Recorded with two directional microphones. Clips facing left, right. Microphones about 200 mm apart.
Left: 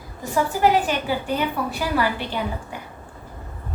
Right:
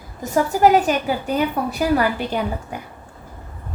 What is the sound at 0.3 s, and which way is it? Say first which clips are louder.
A woman's voice: right 4 dB; 45° right (ahead or behind).